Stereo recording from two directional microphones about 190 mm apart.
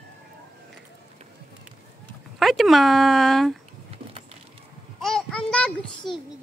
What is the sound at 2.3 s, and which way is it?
Speech, centre (ahead or behind).